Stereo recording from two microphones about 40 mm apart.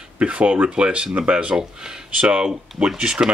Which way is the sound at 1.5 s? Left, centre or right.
Right.